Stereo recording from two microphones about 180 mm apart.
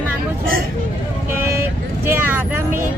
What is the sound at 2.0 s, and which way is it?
Speech, 10° right (ahead or behind).